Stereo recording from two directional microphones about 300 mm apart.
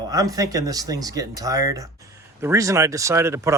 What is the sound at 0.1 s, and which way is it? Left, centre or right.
Speech, centre.